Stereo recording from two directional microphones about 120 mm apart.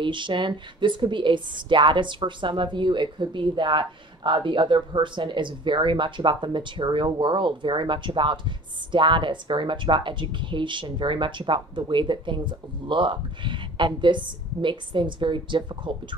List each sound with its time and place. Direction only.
0.0 s a woman's voice: 40° right (ahead or behind)